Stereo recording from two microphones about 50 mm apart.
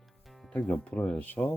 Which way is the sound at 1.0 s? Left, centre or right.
Left.